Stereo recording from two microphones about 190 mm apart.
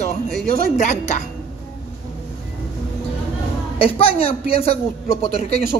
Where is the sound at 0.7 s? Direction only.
40° left (ahead or behind).